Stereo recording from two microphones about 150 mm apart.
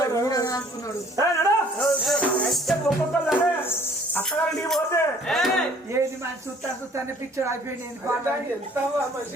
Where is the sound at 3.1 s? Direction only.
10° left (ahead or behind).